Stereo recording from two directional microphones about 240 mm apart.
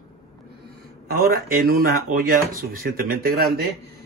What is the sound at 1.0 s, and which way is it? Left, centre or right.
Speech, right.